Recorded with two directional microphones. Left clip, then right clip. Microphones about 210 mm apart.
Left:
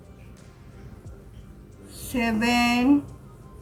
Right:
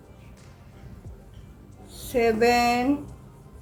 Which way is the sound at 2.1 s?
25° right (ahead or behind).